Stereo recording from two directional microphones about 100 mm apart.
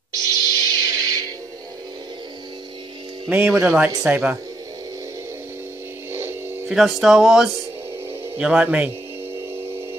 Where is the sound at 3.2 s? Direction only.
10° right (ahead or behind).